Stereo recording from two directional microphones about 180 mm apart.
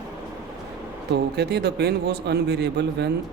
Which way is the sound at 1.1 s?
65° right (ahead or behind).